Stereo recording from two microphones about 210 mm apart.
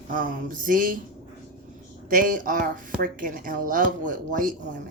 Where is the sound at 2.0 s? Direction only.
40° right (ahead or behind).